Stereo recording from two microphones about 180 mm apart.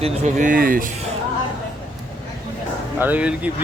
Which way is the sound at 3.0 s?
10° right (ahead or behind).